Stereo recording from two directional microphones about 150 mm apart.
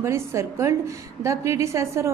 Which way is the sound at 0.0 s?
20° right (ahead or behind).